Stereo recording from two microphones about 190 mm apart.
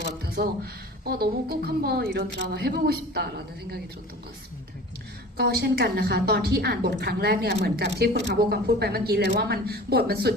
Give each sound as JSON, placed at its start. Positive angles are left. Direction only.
{"t": 0.0, "sound": "a woman's voice", "side_deg": -55}
{"t": 5.4, "sound": "a woman's voice", "side_deg": -60}